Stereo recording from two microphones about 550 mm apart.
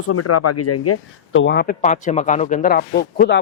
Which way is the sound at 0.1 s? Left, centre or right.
Left.